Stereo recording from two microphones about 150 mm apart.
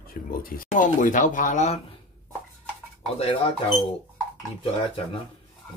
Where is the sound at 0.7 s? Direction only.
60° left (ahead or behind).